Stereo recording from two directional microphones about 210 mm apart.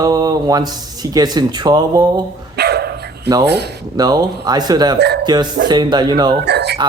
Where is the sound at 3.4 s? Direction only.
50° right (ahead or behind).